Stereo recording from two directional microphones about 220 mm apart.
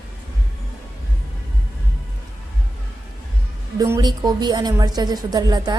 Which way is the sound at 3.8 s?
20° right (ahead or behind).